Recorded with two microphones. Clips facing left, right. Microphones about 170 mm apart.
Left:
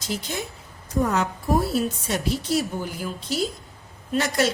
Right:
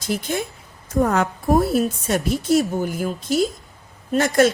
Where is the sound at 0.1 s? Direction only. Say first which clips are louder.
Right 6 dB; 55° right (ahead or behind).